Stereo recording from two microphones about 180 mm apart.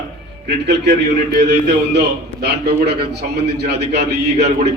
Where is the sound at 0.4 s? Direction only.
70° right (ahead or behind).